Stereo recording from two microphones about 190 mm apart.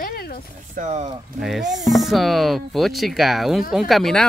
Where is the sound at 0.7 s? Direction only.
40° right (ahead or behind).